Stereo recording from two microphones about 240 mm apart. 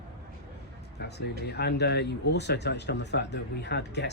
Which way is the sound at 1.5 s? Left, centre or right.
Left.